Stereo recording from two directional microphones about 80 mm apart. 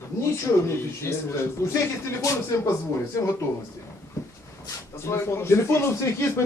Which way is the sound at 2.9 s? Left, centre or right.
Left.